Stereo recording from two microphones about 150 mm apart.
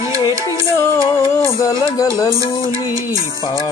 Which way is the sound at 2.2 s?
20° left (ahead or behind).